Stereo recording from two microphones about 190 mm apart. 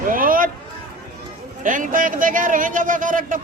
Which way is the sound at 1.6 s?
45° right (ahead or behind).